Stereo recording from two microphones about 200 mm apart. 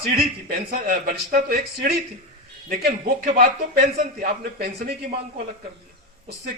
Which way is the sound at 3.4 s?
40° right (ahead or behind).